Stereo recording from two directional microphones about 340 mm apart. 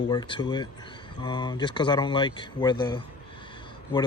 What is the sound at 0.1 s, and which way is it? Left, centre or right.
Speech, centre.